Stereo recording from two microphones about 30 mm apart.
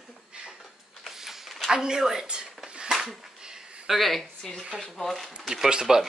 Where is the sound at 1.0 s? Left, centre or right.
Centre.